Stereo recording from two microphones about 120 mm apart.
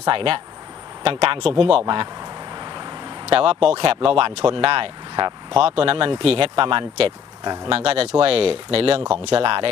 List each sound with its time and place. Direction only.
0.0 s speech: 45° right (ahead or behind)
2.6 s vehicle: 35° right (ahead or behind)
3.2 s speech: 50° right (ahead or behind)
5.6 s speech: 50° right (ahead or behind)
7.4 s speech: 35° right (ahead or behind)
7.7 s speech: 55° right (ahead or behind)
9.0 s speech: 5° right (ahead or behind)
9.2 s speech: 45° right (ahead or behind)